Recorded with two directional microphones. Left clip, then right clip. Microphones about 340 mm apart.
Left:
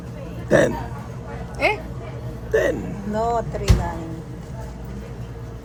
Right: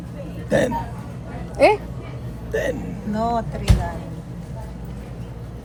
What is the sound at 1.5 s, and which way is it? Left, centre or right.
Speech, centre.